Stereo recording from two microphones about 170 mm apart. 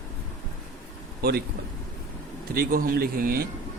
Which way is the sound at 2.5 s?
60° right (ahead or behind).